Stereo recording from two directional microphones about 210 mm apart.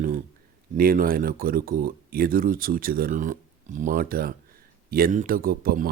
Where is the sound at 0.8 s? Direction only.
45° right (ahead or behind).